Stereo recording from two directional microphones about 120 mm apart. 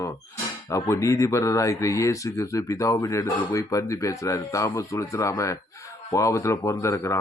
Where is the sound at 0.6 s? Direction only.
25° left (ahead or behind).